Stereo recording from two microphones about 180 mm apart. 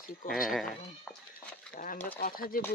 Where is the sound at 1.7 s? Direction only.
50° left (ahead or behind).